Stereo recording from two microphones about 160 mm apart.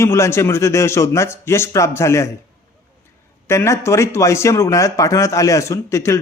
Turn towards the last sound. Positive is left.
turn(degrees=20)  # may be behind; listen again after turning